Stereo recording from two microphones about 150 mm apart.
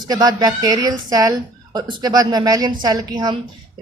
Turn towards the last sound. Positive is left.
turn(degrees=-25)  # may be behind; listen again after turning